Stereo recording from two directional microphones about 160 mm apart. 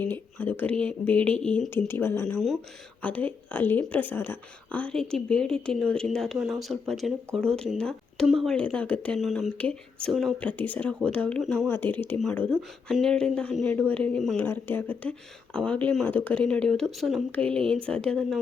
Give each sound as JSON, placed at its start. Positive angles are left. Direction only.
{"t": 0.0, "sound": "speech", "side_deg": 10}